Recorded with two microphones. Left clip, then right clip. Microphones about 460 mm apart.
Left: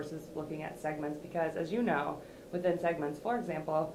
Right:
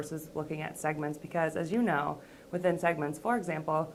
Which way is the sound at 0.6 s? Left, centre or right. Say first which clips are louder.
Right 3 dB; right.